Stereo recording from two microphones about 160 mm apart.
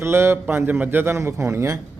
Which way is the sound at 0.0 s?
15° right (ahead or behind).